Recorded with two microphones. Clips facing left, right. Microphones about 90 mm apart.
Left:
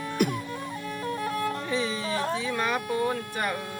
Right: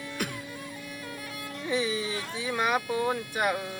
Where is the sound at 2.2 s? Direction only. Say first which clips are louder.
Left 8 dB; 45° left (ahead or behind).